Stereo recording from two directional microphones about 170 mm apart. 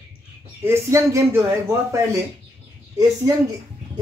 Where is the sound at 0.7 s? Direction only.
15° right (ahead or behind).